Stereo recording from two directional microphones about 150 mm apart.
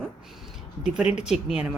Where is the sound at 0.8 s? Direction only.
5° right (ahead or behind).